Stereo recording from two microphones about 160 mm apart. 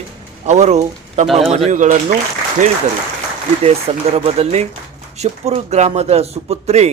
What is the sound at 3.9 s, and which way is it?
Speech, 35° right (ahead or behind).